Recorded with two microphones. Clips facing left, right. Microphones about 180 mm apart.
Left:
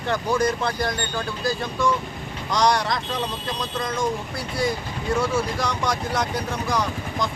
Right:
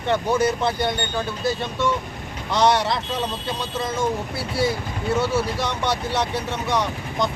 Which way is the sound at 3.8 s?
5° right (ahead or behind).